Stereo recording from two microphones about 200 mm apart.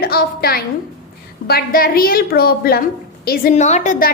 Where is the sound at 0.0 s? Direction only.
50° left (ahead or behind).